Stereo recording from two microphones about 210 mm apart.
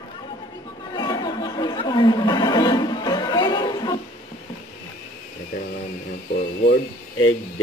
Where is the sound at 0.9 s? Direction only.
20° left (ahead or behind).